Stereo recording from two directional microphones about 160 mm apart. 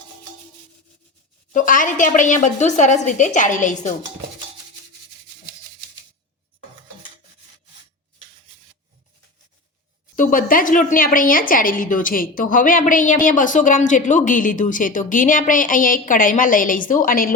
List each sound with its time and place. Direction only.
1.5 s a woman's voice: 55° left (ahead or behind)
10.2 s a woman's voice: 60° left (ahead or behind)